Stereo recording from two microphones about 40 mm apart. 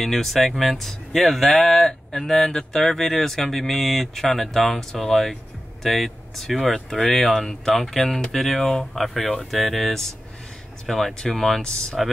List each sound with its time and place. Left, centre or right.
0.0 s speech: centre
8.5 s speech: centre
8.9 s speech: centre